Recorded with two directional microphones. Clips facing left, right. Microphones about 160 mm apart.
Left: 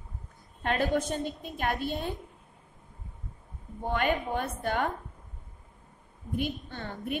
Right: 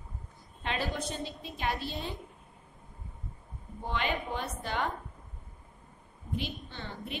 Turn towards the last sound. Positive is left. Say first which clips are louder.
# left 6 dB
turn(degrees=50)  # may be behind; listen again after turning